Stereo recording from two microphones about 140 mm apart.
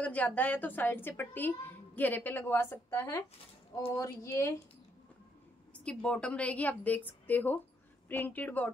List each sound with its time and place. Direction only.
0.0 s a woman's voice: 10° left (ahead or behind)
5.9 s a woman's voice: 5° left (ahead or behind)